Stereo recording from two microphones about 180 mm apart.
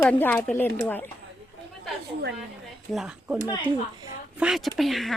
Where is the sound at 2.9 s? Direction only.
5° right (ahead or behind).